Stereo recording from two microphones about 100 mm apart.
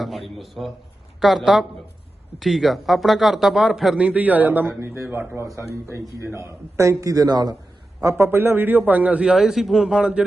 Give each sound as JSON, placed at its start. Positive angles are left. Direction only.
{"t": 0.0, "sound": "a sound", "side_deg": 0}
{"t": 1.2, "sound": "speech", "side_deg": 0}
{"t": 4.0, "sound": "a man's voice", "side_deg": -15}
{"t": 8.2, "sound": "a man's voice", "side_deg": -25}